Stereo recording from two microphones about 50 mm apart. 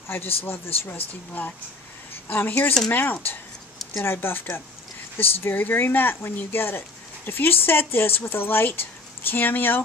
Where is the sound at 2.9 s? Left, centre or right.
Left.